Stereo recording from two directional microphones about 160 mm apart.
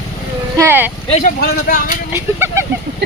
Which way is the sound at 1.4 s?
65° left (ahead or behind).